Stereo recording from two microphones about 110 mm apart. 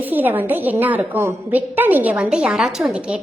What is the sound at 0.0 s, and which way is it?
A woman's voice, 15° right (ahead or behind).